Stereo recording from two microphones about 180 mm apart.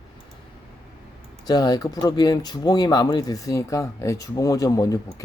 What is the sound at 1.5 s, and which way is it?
Speech, 20° left (ahead or behind).